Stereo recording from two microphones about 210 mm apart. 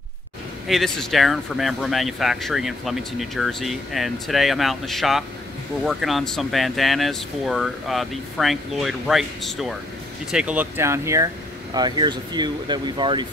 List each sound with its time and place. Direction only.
0.7 s speech: centre (ahead or behind); by 13.3 s 20° right (ahead or behind)